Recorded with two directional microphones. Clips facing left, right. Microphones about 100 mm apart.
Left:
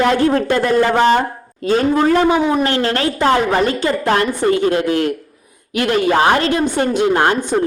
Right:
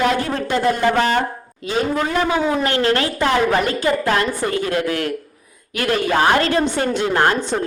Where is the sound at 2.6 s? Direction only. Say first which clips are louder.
Left 1 dB; 35° left (ahead or behind).